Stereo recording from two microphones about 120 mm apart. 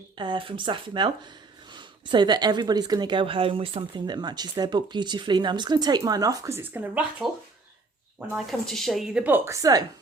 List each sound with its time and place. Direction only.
0.2 s a woman's voice: 45° right (ahead or behind); by 7.3 s 15° right (ahead or behind)
8.3 s a woman's voice: centre (ahead or behind)
9.2 s speech: 20° right (ahead or behind)